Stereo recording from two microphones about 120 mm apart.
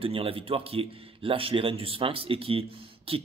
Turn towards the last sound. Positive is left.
turn(degrees=-50)  # may be behind; listen again after turning